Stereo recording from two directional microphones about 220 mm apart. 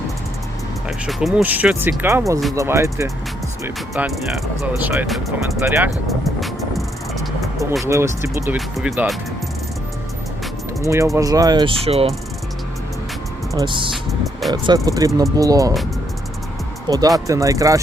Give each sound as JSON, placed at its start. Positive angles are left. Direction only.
{"t": 0.9, "sound": "speech", "side_deg": 0}
{"t": 3.9, "sound": "speech", "side_deg": 0}
{"t": 6.1, "sound": "music", "side_deg": 0}
{"t": 7.9, "sound": "speech", "side_deg": -15}
{"t": 8.5, "sound": "speech", "side_deg": 0}
{"t": 10.8, "sound": "speech", "side_deg": -15}
{"t": 13.5, "sound": "speech", "side_deg": -20}
{"t": 16.9, "sound": "speech", "side_deg": -20}